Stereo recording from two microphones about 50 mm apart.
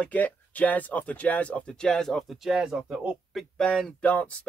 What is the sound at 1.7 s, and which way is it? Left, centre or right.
Speech, centre.